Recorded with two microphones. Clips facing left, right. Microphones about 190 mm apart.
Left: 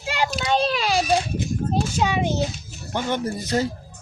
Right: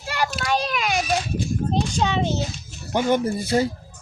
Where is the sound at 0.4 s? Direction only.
30° left (ahead or behind).